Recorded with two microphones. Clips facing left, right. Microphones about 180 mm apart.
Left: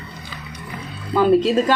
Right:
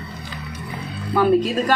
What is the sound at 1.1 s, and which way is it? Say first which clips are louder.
Speech: left 2 dB; 25° left (ahead or behind).